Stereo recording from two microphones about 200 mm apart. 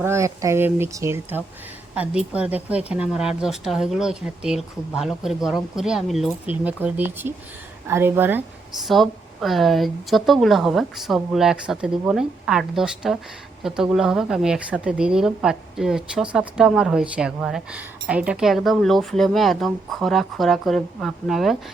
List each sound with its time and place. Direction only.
0.0 s speech: 15° right (ahead or behind)